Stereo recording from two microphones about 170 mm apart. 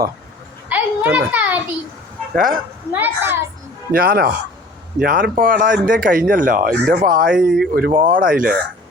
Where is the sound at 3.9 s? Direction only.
65° right (ahead or behind).